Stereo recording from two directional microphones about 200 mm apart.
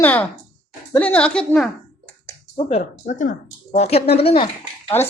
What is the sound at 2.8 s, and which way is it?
Speech, 40° left (ahead or behind).